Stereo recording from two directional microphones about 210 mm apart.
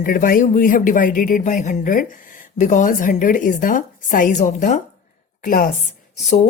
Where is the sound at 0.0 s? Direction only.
40° left (ahead or behind).